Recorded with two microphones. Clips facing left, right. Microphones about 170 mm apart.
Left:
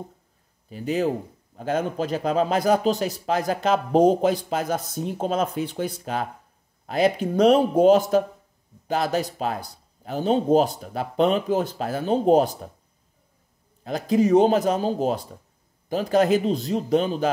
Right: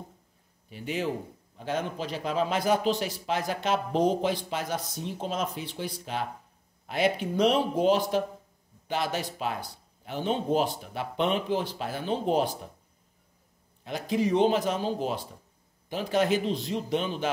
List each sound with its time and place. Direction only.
0.7 s a man's voice: 40° left (ahead or behind)
13.8 s speech: 40° left (ahead or behind)